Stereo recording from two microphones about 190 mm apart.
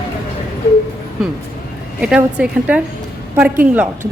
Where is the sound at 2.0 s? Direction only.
5° right (ahead or behind).